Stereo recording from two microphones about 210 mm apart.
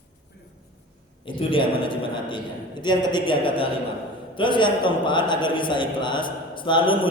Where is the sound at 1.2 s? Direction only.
25° left (ahead or behind).